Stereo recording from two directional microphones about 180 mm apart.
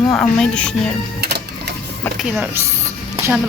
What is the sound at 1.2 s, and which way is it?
Music, 65° right (ahead or behind).